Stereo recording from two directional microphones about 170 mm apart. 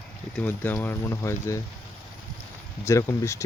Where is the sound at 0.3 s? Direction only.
10° left (ahead or behind).